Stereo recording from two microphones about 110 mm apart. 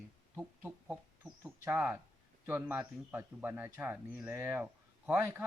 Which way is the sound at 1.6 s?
20° right (ahead or behind).